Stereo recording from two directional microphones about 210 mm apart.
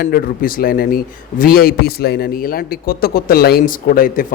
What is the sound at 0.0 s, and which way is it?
A man's voice, 45° left (ahead or behind).